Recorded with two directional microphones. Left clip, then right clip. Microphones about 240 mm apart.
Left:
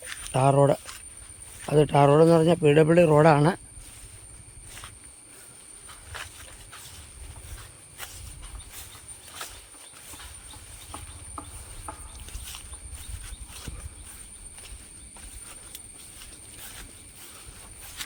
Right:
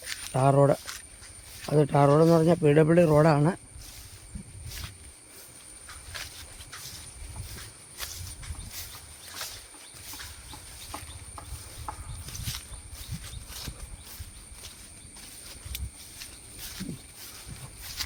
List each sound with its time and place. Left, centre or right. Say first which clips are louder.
0.0 s a sound: right 1 dB; centre
0.3 s speech: left 1 dB; centre
11.9 s horse: right 1 dB; right